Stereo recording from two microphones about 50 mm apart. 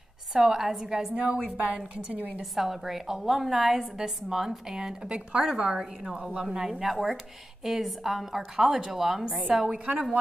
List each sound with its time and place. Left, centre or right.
0.3 s a woman's voice: centre
1.1 s a woman's voice: right
2.5 s a woman's voice: centre